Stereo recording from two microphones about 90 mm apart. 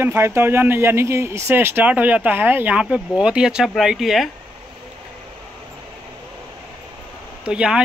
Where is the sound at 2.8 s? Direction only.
10° right (ahead or behind).